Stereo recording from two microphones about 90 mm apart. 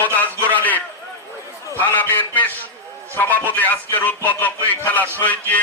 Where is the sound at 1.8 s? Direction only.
20° left (ahead or behind).